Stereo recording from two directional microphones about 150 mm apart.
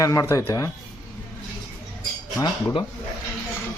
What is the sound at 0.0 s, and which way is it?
Speech, 20° left (ahead or behind).